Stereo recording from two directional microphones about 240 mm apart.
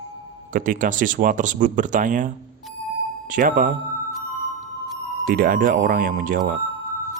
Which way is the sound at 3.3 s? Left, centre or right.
Right.